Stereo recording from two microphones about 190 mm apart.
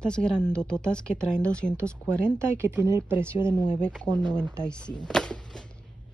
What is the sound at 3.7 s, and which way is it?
A woman's voice, 5° left (ahead or behind).